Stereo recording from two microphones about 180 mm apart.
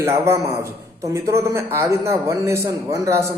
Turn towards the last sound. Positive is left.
turn(degrees=-15)  # may be behind; listen again after turning